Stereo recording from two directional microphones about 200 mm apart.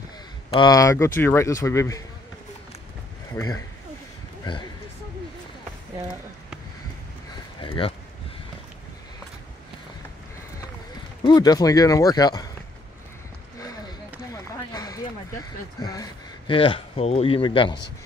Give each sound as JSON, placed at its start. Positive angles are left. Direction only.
{"t": 0.5, "sound": "speech", "side_deg": 20}
{"t": 3.3, "sound": "speech", "side_deg": 15}
{"t": 7.6, "sound": "speech", "side_deg": 25}
{"t": 11.2, "sound": "speech", "side_deg": 20}
{"t": 14.7, "sound": "speech", "side_deg": 20}